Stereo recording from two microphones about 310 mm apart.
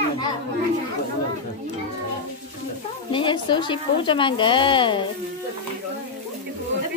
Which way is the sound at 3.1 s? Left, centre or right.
Centre.